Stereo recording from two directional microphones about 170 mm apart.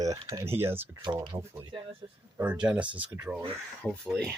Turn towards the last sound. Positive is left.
turn(degrees=5)  # may be behind; listen again after turning